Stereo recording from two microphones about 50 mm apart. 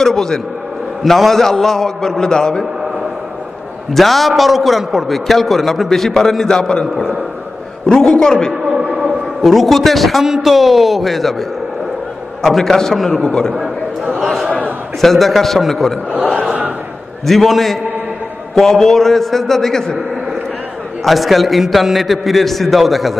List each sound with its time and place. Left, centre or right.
0.0 s a man's voice: centre
3.9 s a man's voice: centre
9.4 s a man's voice: centre
12.4 s a man's voice: centre
14.2 s a sound: centre
15.0 s a man's voice: centre
16.1 s a man's voice: right
17.3 s a man's voice: centre
21.0 s a man's voice: centre